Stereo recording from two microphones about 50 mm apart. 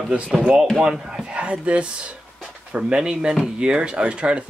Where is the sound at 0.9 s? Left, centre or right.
Centre.